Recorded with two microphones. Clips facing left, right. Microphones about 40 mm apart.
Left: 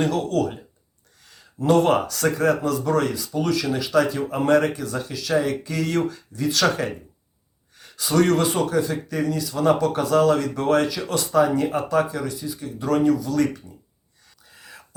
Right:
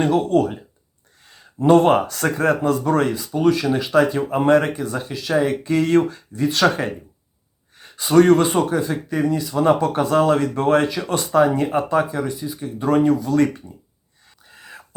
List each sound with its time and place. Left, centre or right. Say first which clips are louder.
0.0 s speech: right 5 dB; right
14.4 s whispering: right 4 dB; right